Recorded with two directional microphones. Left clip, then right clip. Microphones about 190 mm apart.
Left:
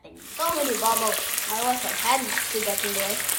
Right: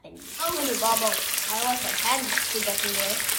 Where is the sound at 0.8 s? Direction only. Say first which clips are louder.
Even; 10° left (ahead or behind).